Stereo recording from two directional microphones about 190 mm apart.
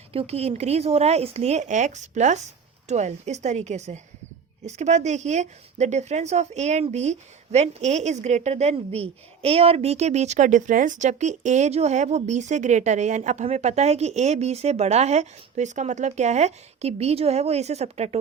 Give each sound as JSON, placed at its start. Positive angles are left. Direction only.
{"t": 0.1, "sound": "speech", "side_deg": -30}